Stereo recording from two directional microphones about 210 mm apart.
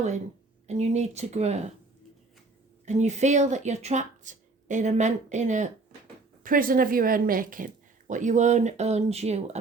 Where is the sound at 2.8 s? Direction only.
35° right (ahead or behind).